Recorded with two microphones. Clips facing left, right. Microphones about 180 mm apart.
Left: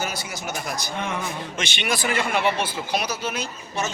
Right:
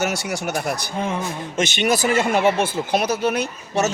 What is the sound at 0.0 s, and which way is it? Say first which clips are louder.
Speech: right 7 dB; 75° right (ahead or behind).